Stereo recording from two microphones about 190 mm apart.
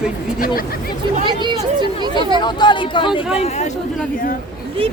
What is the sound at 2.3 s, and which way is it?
Speech, 25° left (ahead or behind).